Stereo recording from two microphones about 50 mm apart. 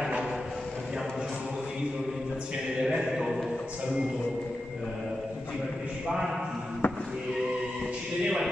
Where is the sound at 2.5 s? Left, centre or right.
Centre.